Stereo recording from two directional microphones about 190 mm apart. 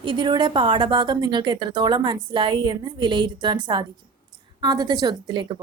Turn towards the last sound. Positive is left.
turn(degrees=-25)  # may be behind; listen again after turning